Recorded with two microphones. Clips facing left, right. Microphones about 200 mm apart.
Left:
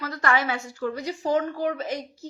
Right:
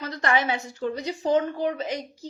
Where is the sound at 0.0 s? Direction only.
20° right (ahead or behind).